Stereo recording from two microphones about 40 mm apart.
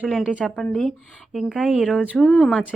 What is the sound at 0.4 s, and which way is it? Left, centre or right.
Speech, centre.